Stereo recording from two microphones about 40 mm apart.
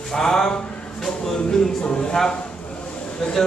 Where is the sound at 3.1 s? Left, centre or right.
Centre.